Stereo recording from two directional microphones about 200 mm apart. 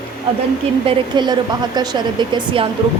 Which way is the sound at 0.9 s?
20° right (ahead or behind).